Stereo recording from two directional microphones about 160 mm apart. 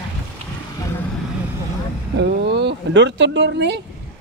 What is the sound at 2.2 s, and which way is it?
Speech, 90° right.